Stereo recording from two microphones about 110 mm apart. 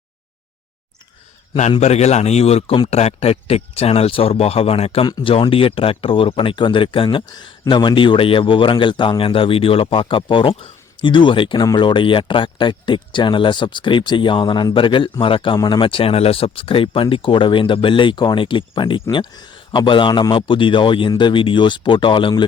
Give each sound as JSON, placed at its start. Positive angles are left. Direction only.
{"t": 1.8, "sound": "speech", "side_deg": 80}
{"t": 15.5, "sound": "speech", "side_deg": 40}